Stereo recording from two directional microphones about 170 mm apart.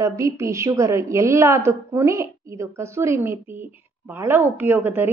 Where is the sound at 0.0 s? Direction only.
15° right (ahead or behind).